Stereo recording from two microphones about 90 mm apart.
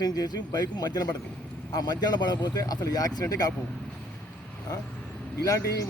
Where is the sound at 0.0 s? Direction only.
45° left (ahead or behind).